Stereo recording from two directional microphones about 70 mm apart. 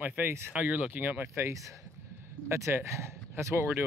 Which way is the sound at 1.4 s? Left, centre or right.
Right.